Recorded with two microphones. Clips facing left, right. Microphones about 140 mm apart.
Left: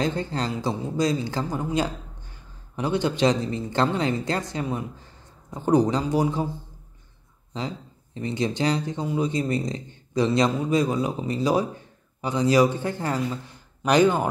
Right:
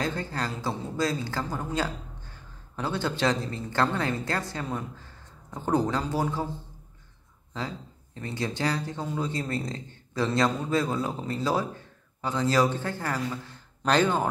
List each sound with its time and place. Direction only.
0.0 s speech: 20° left (ahead or behind)
7.5 s speech: 20° left (ahead or behind)